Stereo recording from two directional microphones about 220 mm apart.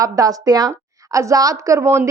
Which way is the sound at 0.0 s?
15° right (ahead or behind).